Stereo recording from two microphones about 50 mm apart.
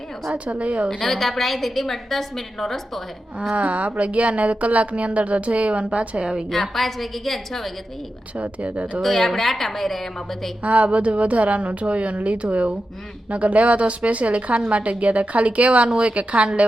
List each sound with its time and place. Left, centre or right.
0.4 s speech: right
0.9 s a woman's voice: centre
3.5 s speech: right
6.5 s a woman's voice: centre
8.4 s speech: right
9.0 s a woman's voice: centre
10.6 s speech: right